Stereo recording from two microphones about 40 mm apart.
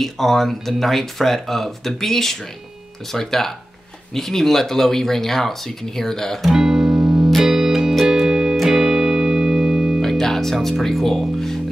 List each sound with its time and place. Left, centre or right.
0.0 s speech: centre
6.5 s music: centre
7.4 s music: centre
10.0 s speech: centre